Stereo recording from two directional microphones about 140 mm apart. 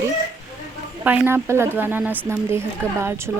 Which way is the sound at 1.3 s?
20° right (ahead or behind).